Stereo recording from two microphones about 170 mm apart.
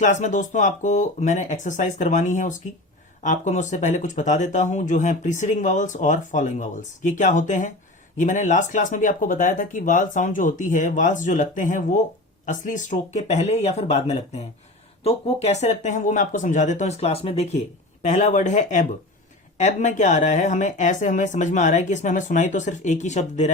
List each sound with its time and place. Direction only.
0.0 s speech: 45° left (ahead or behind)